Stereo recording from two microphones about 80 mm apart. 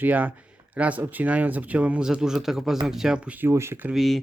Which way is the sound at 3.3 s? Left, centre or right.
Right.